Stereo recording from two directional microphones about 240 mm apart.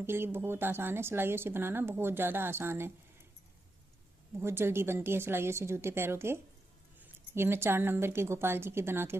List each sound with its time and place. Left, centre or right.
0.0 s speech: centre
4.4 s speech: centre